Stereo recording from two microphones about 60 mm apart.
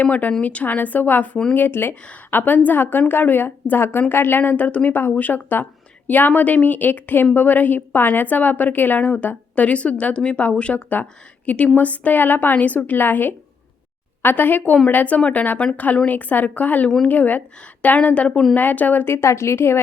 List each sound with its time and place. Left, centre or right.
0.0 s a woman's voice: left
18.5 s speech: left